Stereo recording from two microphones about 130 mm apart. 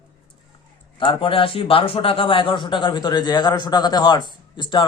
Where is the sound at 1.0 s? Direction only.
40° left (ahead or behind).